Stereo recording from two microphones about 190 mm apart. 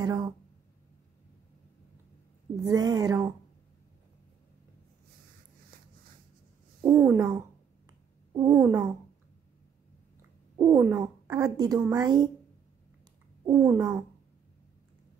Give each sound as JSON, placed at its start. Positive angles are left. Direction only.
{"t": 0.0, "sound": "speech", "side_deg": -20}
{"t": 2.6, "sound": "speech", "side_deg": -20}
{"t": 6.9, "sound": "a sound", "side_deg": -15}
{"t": 8.5, "sound": "a sound", "side_deg": -15}
{"t": 10.6, "sound": "speech", "side_deg": -15}
{"t": 13.5, "sound": "speech", "side_deg": -20}